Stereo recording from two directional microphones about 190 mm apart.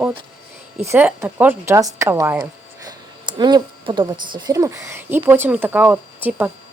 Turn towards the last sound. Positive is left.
turn(degrees=-10)  # may be behind; listen again after turning